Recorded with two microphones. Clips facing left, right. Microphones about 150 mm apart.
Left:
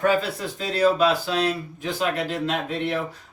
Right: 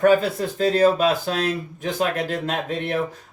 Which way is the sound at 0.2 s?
45° right (ahead or behind).